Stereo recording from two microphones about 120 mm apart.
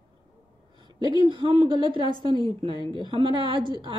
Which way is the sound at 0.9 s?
40° right (ahead or behind).